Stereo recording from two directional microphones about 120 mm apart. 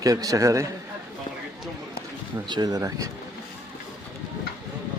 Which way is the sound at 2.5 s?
30° right (ahead or behind).